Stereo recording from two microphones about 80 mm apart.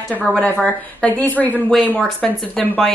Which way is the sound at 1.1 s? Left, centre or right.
Left.